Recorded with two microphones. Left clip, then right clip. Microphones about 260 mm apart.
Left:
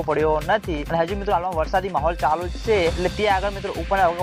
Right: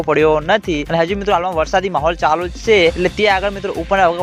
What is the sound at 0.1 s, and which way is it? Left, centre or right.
Speech, right.